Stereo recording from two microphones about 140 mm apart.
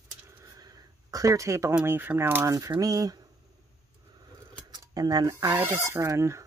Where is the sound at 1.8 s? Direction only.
15° right (ahead or behind).